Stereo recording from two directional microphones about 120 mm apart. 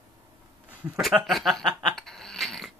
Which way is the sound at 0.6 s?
10° right (ahead or behind).